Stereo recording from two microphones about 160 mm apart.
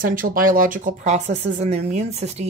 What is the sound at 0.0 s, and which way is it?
Speech, 60° right (ahead or behind).